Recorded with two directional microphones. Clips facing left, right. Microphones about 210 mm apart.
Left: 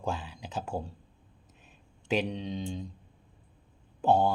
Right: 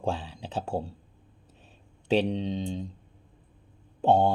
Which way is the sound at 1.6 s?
30° right (ahead or behind).